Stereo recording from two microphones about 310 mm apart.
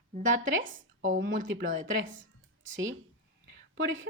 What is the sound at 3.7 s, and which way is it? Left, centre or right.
Speech, right.